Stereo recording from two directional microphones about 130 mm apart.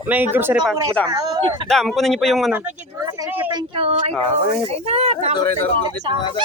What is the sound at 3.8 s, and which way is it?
Speech, 50° right (ahead or behind).